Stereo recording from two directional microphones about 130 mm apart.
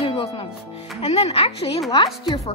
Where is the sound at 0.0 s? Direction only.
45° left (ahead or behind).